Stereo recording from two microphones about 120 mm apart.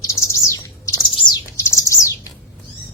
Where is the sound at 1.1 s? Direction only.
45° left (ahead or behind).